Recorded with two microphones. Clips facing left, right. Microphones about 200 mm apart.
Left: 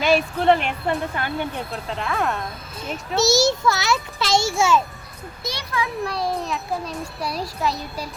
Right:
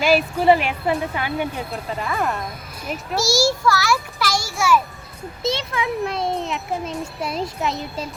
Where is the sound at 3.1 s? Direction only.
20° left (ahead or behind).